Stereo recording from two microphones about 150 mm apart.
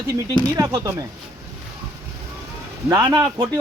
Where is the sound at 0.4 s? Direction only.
20° right (ahead or behind).